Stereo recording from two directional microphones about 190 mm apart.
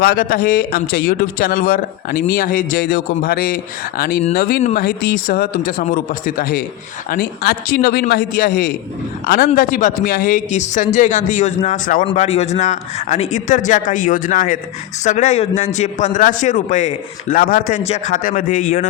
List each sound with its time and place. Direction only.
0.0 s a man's voice: 50° left (ahead or behind)